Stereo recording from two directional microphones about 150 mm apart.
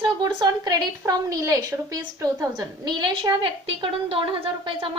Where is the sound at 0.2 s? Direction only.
25° right (ahead or behind).